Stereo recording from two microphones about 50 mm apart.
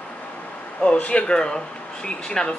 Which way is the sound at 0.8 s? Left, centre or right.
Left.